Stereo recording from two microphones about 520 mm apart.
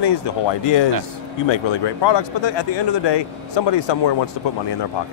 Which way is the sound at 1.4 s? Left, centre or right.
Left.